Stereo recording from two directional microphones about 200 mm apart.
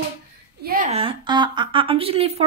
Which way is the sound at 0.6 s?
45° right (ahead or behind).